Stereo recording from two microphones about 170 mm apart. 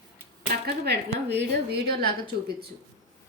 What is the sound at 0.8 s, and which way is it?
A woman's voice, 75° right (ahead or behind).